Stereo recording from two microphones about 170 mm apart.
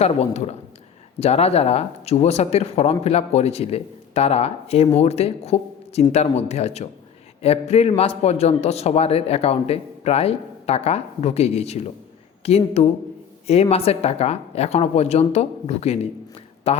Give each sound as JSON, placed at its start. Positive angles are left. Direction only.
{"t": 0.0, "sound": "a man's voice", "side_deg": 40}